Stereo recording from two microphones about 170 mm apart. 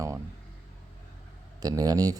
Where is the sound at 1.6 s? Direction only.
20° right (ahead or behind).